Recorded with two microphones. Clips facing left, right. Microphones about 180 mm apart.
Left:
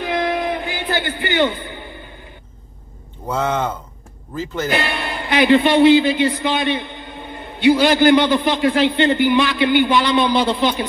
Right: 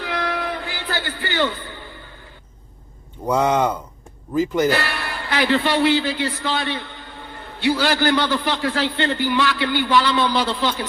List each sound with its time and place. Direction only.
0.0 s a sound: 20° left (ahead or behind)
3.3 s speech: 15° right (ahead or behind)
4.6 s a man's voice: 20° left (ahead or behind)